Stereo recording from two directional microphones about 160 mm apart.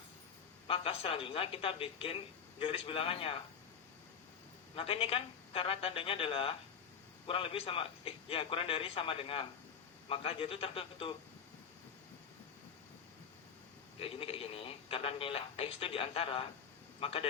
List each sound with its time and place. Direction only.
0.7 s speech: 35° left (ahead or behind)
4.7 s speech: 35° left (ahead or behind)
14.0 s a man's voice: 35° left (ahead or behind)